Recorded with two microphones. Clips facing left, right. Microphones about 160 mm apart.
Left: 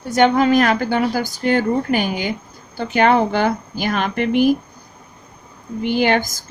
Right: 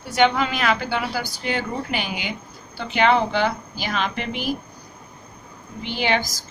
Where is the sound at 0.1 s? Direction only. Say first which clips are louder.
Left 6 dB; 45° left (ahead or behind).